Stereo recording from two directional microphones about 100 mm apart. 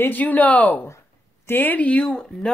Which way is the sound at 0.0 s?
15° left (ahead or behind).